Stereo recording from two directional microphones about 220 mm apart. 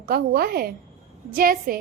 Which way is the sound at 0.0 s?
45° right (ahead or behind).